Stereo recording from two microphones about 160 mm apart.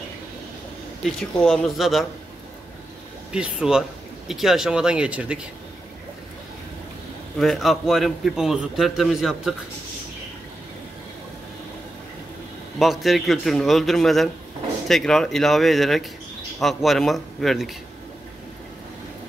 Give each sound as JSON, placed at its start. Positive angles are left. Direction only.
{"t": 1.3, "sound": "a man's voice", "side_deg": 5}
{"t": 3.3, "sound": "a man's voice", "side_deg": -5}
{"t": 7.3, "sound": "a man's voice", "side_deg": 0}
{"t": 12.7, "sound": "a man's voice", "side_deg": 0}